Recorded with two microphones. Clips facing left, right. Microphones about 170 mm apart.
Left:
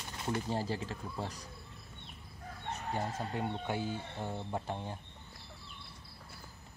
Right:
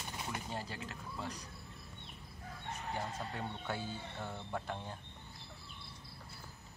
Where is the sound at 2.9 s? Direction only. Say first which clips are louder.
Left 5 dB; 20° left (ahead or behind).